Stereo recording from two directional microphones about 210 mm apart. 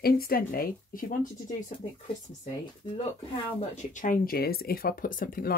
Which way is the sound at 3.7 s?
35° left (ahead or behind).